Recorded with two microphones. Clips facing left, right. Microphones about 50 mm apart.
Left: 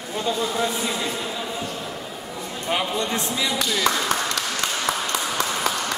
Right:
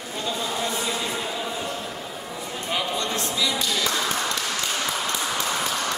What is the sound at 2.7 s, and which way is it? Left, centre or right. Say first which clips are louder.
Speech: left 3 dB; left.